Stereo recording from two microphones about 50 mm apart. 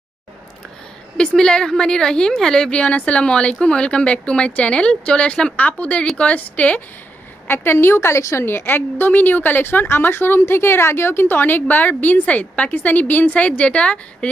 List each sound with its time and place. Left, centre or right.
1.1 s a woman's voice: centre
2.7 s speech: left
5.6 s speech: left
7.4 s a woman's voice: left
8.5 s a woman's voice: left
13.3 s speech: left